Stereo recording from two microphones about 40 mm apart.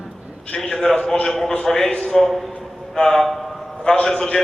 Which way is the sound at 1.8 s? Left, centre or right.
Left.